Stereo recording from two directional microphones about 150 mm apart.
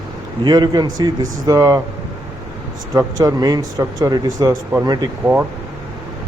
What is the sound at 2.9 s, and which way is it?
Speech, 25° right (ahead or behind).